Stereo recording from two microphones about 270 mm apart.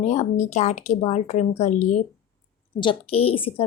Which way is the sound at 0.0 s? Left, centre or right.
Left.